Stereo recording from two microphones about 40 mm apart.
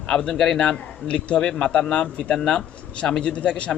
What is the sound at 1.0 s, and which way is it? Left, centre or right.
A man's voice, left.